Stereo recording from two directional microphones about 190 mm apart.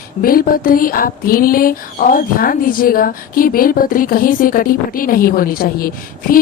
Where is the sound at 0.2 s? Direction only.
50° left (ahead or behind).